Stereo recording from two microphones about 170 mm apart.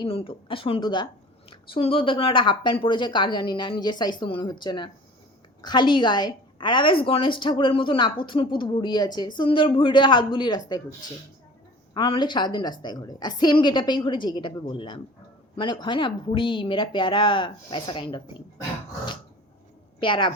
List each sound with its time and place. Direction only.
0.0 s a woman's voice: 30° left (ahead or behind)
11.9 s a woman's voice: 30° left (ahead or behind)
20.0 s a woman's voice: 30° left (ahead or behind)